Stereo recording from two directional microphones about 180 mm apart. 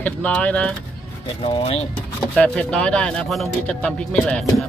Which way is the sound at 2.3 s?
5° left (ahead or behind).